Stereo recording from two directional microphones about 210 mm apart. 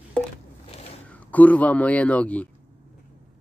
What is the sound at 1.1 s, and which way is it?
A man's voice, 5° left (ahead or behind).